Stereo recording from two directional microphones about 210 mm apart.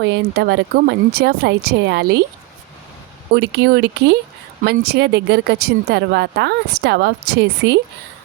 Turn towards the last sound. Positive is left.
turn(degrees=-55)  # may be behind; listen again after turning